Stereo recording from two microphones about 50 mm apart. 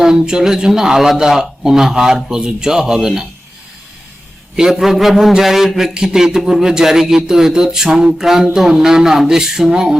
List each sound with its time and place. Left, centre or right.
0.0 s a man's voice: centre
4.5 s a man's voice: centre